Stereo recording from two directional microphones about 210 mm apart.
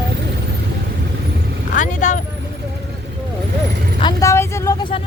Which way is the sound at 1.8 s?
35° left (ahead or behind).